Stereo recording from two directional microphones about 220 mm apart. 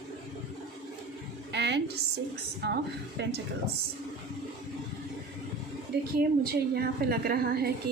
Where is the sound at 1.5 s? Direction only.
50° right (ahead or behind).